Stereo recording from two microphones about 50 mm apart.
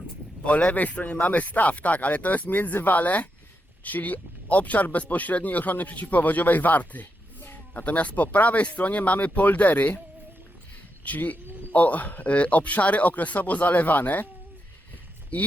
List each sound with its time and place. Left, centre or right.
0.4 s speech: left
11.0 s speech: left
15.3 s speech: left